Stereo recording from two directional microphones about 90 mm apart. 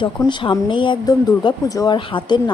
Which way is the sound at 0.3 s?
65° left (ahead or behind).